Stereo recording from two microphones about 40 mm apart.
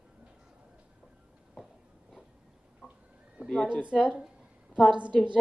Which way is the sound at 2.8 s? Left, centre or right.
Centre.